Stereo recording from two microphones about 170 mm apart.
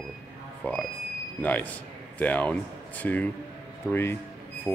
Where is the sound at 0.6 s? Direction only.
5° left (ahead or behind).